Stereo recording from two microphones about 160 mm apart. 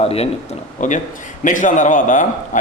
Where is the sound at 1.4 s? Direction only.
55° left (ahead or behind).